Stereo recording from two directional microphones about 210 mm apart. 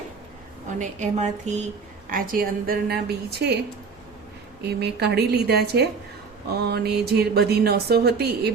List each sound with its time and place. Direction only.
0.8 s a woman's voice: 35° right (ahead or behind)
4.6 s speech: 50° right (ahead or behind)